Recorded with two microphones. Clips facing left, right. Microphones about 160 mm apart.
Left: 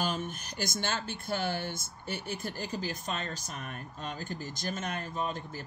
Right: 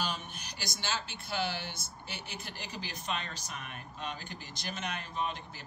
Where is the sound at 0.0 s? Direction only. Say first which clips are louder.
Left 4 dB; 45° left (ahead or behind).